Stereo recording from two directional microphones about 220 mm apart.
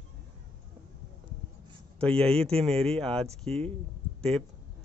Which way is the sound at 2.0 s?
5° left (ahead or behind).